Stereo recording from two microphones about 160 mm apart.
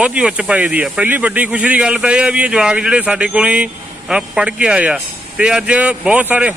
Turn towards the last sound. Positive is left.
turn(degrees=-10)  # may be behind; listen again after turning